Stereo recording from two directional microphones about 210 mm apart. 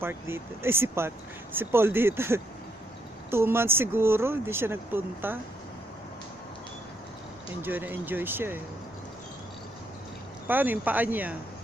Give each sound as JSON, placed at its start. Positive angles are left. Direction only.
{"t": 0.0, "sound": "speech", "side_deg": -10}
{"t": 7.6, "sound": "speech", "side_deg": -10}
{"t": 10.4, "sound": "speech", "side_deg": -10}